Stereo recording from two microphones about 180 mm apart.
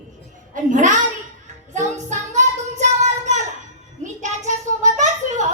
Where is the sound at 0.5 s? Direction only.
45° right (ahead or behind).